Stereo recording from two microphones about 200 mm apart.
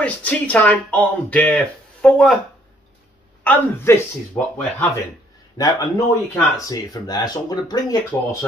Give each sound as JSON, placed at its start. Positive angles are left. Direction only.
{"t": 0.0, "sound": "speech", "side_deg": 5}
{"t": 3.4, "sound": "speech", "side_deg": 15}
{"t": 5.6, "sound": "speech", "side_deg": 15}